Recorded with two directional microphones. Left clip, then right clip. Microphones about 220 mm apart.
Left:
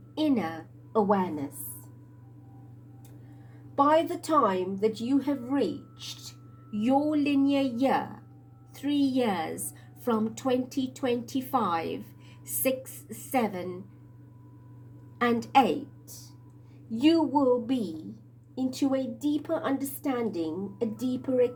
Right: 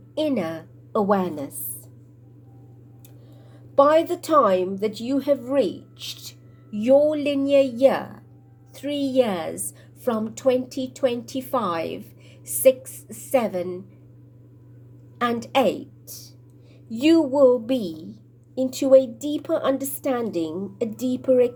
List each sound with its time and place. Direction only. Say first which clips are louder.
0.1 s a woman's voice: right 4 dB; 30° right (ahead or behind)
3.8 s a woman's voice: right 6 dB; 35° right (ahead or behind)
15.2 s a woman's voice: right 2 dB; 30° right (ahead or behind)